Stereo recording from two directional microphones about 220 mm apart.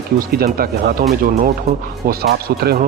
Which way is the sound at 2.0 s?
45° right (ahead or behind).